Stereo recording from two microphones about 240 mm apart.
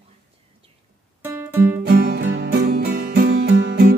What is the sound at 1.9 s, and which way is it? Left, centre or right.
Music, right.